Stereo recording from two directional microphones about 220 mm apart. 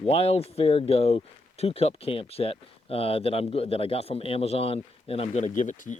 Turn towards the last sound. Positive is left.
turn(degrees=35)  # may be behind; listen again after turning